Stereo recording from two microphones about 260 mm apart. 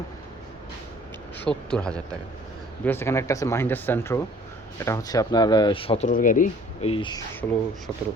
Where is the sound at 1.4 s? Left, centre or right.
Centre.